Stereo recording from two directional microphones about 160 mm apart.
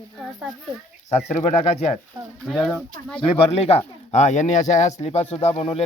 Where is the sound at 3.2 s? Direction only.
40° left (ahead or behind).